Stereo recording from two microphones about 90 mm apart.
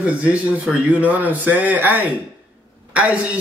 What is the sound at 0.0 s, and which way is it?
A man's voice, 15° right (ahead or behind).